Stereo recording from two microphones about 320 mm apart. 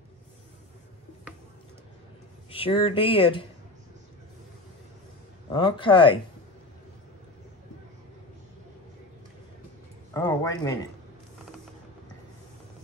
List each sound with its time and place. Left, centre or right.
2.5 s speech: centre
5.5 s speech: centre
10.1 s speech: centre